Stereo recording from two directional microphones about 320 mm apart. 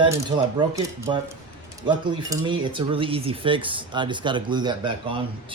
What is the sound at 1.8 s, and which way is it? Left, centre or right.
Speech, centre.